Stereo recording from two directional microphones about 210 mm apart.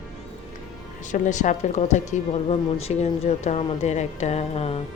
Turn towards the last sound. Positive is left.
turn(degrees=30)  # may be behind; listen again after turning